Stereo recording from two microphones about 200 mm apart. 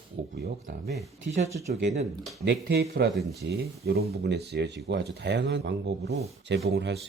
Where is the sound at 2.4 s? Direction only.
55° right (ahead or behind).